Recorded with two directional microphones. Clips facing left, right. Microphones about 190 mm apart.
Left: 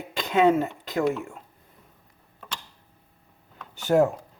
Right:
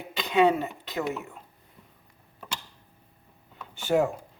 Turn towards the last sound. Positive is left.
turn(degrees=40)  # may be behind; listen again after turning